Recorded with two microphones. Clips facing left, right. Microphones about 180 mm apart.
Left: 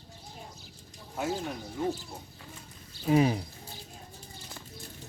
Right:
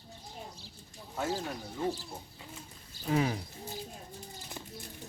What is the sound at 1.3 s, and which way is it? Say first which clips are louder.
Speech: left 2 dB; centre (ahead or behind).